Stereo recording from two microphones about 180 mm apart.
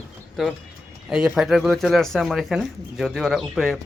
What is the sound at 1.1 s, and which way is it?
Speech, 5° right (ahead or behind).